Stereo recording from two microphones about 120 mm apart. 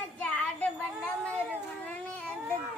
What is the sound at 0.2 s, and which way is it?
Child singing, 10° left (ahead or behind).